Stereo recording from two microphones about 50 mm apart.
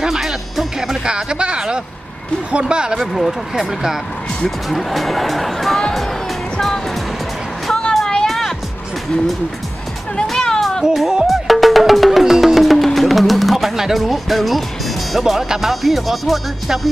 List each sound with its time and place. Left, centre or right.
0.0 s music: centre
1.0 s speech: centre
3.0 s speech: centre
7.9 s a sound: centre
8.3 s music: centre
10.2 s music: centre
10.8 s speech: centre
11.2 s music: centre
15.1 s speech: centre